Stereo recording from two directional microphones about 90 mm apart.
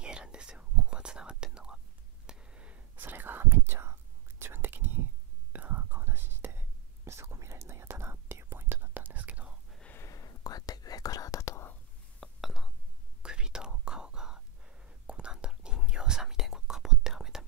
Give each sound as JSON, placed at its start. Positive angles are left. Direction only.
{"t": 0.0, "sound": "whispering", "side_deg": -10}
{"t": 10.0, "sound": "whispering", "side_deg": 40}
{"t": 12.4, "sound": "whispering", "side_deg": -5}